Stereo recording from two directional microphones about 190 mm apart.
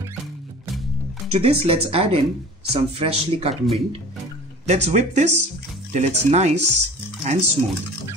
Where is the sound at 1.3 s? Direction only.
30° right (ahead or behind).